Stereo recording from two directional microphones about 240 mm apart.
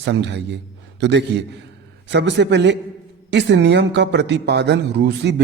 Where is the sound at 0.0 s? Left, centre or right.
Right.